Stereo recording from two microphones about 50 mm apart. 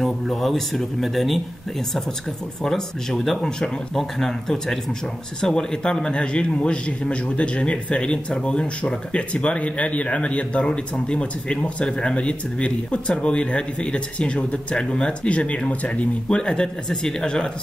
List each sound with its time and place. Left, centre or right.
0.0 s speech: centre
2.6 s a man's voice: centre